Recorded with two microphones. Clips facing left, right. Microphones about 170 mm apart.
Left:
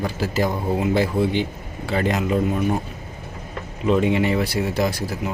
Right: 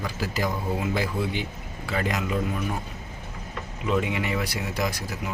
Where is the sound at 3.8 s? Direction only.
30° left (ahead or behind).